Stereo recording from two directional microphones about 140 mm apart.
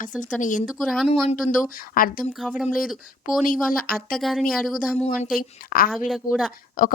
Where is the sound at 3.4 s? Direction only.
85° left.